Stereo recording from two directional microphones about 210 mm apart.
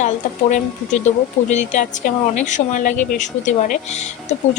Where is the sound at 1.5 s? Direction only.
35° left (ahead or behind).